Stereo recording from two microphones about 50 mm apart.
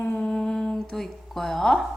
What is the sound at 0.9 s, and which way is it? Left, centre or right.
Speech, centre.